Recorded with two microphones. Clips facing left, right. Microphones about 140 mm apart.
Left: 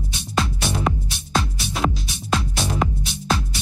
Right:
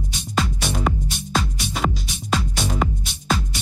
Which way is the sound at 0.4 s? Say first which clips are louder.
Left 1 dB; centre (ahead or behind).